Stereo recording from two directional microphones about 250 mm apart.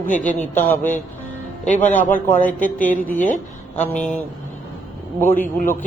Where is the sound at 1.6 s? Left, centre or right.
Left.